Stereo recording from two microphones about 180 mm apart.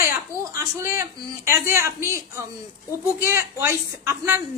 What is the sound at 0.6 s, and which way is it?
Speech, 15° right (ahead or behind).